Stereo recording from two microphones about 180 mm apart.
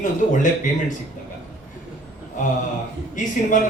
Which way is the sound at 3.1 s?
45° left (ahead or behind).